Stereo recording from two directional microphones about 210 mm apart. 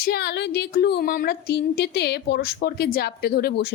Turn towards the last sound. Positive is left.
turn(degrees=50)  # may be behind; listen again after turning